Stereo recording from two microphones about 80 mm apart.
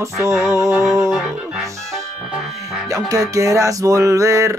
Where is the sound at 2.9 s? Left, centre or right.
Right.